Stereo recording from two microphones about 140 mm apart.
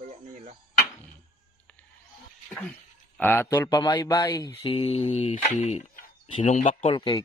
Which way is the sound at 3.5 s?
25° left (ahead or behind).